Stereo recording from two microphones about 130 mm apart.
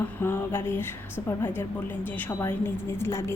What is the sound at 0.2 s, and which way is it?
A woman's voice, 15° left (ahead or behind).